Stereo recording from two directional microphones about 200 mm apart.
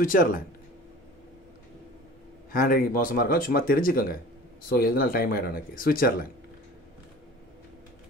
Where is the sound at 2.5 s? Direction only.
45° left (ahead or behind).